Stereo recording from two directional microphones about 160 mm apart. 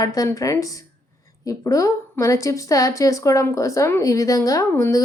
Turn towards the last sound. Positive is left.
turn(degrees=20)  # may be behind; listen again after turning